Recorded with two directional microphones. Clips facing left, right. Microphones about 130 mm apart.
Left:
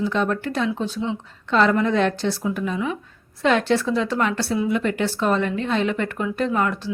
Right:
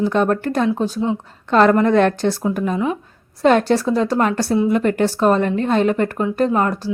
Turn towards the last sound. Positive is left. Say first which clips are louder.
# right 4 dB
turn(degrees=-40)  # may be behind; listen again after turning